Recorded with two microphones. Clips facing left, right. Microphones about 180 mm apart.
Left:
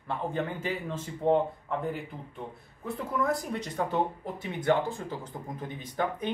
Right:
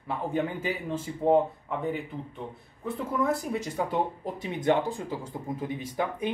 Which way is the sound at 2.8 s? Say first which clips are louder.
Right 2 dB; centre (ahead or behind).